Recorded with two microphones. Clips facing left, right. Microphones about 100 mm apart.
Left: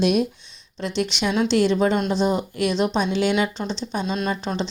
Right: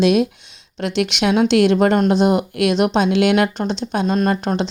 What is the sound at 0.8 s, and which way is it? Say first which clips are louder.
Speech: right 5 dB; 70° right (ahead or behind).